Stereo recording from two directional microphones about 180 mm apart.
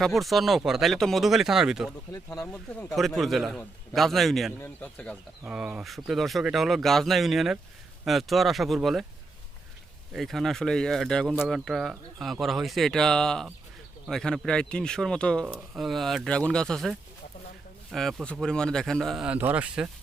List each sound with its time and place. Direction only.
0.0 s speech: centre (ahead or behind)
2.1 s speech: 20° left (ahead or behind)
2.5 s speech: centre (ahead or behind)
5.5 s speech: 5° right (ahead or behind)
10.1 s speech: centre (ahead or behind)